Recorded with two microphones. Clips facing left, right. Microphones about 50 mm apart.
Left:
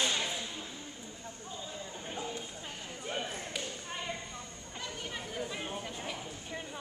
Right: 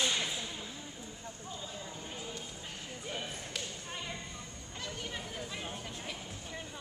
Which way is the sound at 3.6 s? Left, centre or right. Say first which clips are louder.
Left 2 dB; centre.